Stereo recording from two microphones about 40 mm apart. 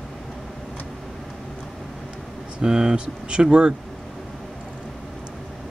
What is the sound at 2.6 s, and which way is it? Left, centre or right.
Speech, centre.